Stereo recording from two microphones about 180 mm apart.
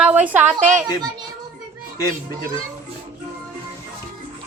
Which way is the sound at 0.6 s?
45° right (ahead or behind).